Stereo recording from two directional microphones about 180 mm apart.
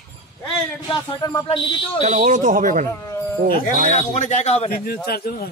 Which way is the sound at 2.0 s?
45° right (ahead or behind).